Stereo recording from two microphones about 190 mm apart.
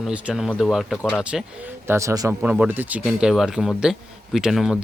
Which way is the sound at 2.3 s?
5° right (ahead or behind).